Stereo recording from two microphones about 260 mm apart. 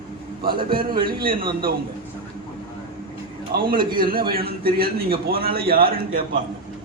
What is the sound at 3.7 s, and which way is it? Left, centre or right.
Speech, centre.